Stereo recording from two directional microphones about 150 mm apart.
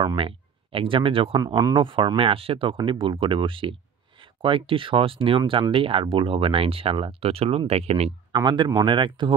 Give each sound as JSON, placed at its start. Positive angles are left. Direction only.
{"t": 0.0, "sound": "speech", "side_deg": -35}
{"t": 1.4, "sound": "speech", "side_deg": -20}
{"t": 1.8, "sound": "speech", "side_deg": -35}
{"t": 8.3, "sound": "speech", "side_deg": -30}